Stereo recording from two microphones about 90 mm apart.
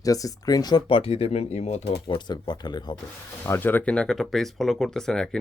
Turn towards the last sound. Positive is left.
turn(degrees=5)  # may be behind; listen again after turning